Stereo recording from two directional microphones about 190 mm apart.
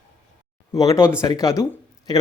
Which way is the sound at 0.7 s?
15° left (ahead or behind).